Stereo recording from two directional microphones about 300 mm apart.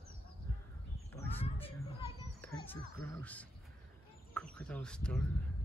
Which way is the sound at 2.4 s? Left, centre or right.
Centre.